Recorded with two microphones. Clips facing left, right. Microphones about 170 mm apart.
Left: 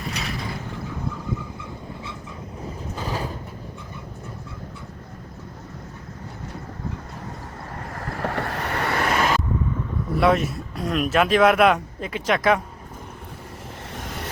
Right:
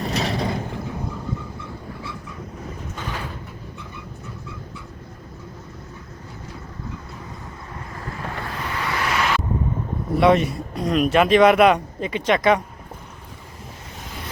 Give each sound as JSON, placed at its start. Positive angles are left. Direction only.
{"t": 0.0, "sound": "mechanisms", "side_deg": -30}
{"t": 2.9, "sound": "mechanisms", "side_deg": 35}
{"t": 7.8, "sound": "waves", "side_deg": 55}
{"t": 10.2, "sound": "speech", "side_deg": 0}